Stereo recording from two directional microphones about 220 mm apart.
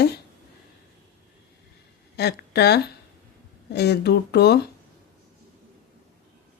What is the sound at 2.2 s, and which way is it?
A woman's voice, 50° left (ahead or behind).